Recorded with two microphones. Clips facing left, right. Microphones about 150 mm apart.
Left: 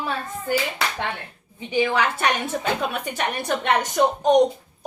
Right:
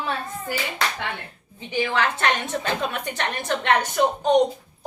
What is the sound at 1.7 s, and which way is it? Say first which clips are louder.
A woman's voice: left 2 dB; 15° left (ahead or behind).